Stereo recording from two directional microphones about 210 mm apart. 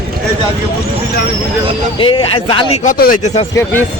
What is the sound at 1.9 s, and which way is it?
Speech, 25° left (ahead or behind).